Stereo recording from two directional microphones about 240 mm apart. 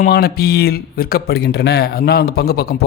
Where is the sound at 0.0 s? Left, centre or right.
Left.